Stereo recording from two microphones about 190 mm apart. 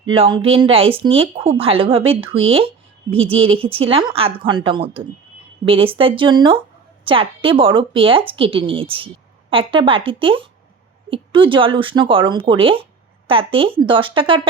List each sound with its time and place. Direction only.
0.1 s speech: 25° right (ahead or behind)